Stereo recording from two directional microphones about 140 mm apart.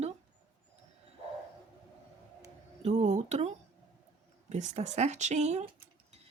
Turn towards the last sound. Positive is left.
turn(degrees=-55)  # may be behind; listen again after turning